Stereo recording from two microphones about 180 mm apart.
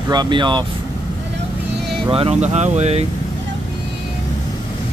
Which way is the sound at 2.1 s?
35° right (ahead or behind).